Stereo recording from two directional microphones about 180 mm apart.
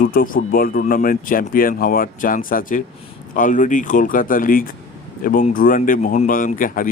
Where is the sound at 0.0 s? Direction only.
50° left (ahead or behind).